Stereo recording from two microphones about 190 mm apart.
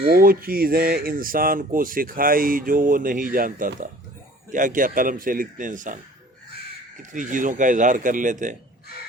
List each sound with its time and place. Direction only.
0.1 s speech: 50° right (ahead or behind)
7.1 s speech: 45° right (ahead or behind)